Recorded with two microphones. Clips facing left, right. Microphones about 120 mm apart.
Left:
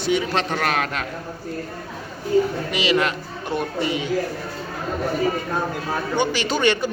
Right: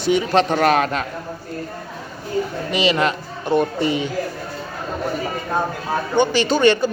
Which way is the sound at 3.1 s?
35° right (ahead or behind).